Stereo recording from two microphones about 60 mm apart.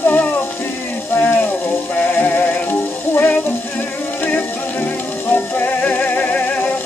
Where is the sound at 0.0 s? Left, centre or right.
Left.